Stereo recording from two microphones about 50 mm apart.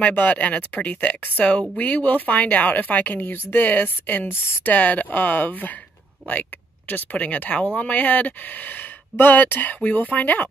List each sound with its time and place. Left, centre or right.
0.0 s speech: left
6.9 s speech: left